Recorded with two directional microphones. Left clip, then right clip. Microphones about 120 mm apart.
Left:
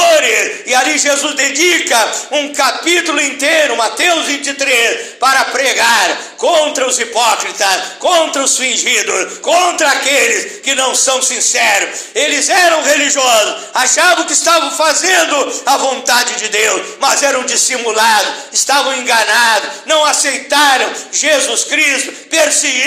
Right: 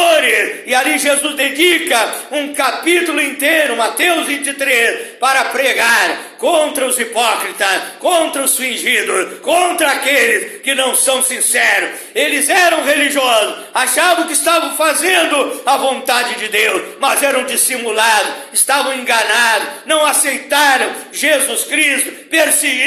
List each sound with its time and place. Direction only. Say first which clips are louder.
0.0 s speech: left 2 dB; 30° right (ahead or behind)